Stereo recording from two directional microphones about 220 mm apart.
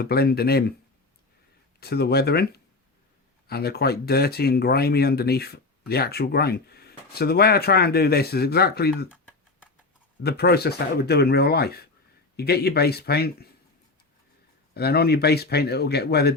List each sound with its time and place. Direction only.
0.0 s speech: 45° left (ahead or behind)
1.8 s speech: 45° left (ahead or behind)
10.2 s speech: 45° left (ahead or behind)
14.7 s speech: 45° left (ahead or behind)